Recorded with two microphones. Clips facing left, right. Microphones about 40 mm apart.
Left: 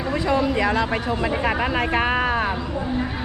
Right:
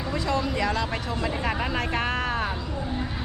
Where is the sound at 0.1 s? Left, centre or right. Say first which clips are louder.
Left 6 dB; centre.